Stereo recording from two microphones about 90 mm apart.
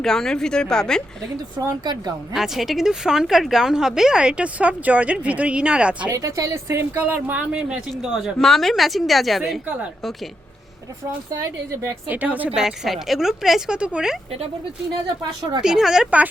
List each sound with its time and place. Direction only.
0.0 s a woman's voice: 5° left (ahead or behind)
1.5 s speech: 50° right (ahead or behind)
2.3 s speech: 5° right (ahead or behind)
6.1 s a woman's voice: 35° right (ahead or behind); by 8.2 s 10° right (ahead or behind)
8.4 s speech: 5° left (ahead or behind)
11.7 s a woman's voice: 30° right (ahead or behind)
12.0 s a woman's voice: 20° right (ahead or behind)
12.5 s speech: 5° right (ahead or behind)
15.0 s a woman's voice: 55° right (ahead or behind)
15.6 s speech: 5° right (ahead or behind)